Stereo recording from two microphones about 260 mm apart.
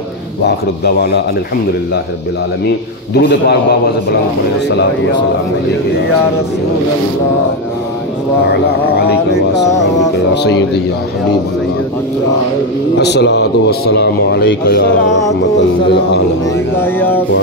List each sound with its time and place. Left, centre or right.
0.4 s a man's voice: left
3.2 s a man's voice: left
10.3 s a man's voice: left
12.9 s a man's voice: left
16.8 s a sound: centre